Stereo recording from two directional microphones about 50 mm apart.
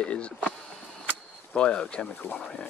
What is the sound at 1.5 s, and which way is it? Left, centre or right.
Speech, left.